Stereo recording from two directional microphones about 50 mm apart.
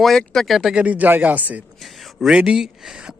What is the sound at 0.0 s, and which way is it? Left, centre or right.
Speech, centre.